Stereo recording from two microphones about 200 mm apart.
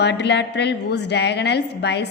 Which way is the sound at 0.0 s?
60° left (ahead or behind).